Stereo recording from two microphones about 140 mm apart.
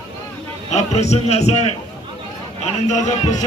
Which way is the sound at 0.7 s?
55° left (ahead or behind).